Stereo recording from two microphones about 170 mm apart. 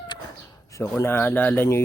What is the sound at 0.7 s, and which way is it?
Speech, 15° left (ahead or behind).